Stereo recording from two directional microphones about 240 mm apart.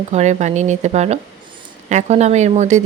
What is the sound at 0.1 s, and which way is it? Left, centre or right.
A woman's voice, right.